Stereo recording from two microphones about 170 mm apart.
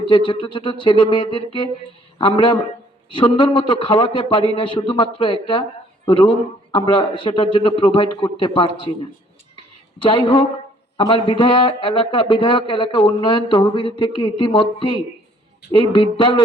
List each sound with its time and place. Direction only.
0.0 s speech: 30° left (ahead or behind)
10.0 s speech: 30° left (ahead or behind)